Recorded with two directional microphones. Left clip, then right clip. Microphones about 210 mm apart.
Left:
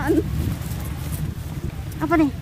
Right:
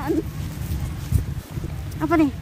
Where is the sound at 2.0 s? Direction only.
15° right (ahead or behind).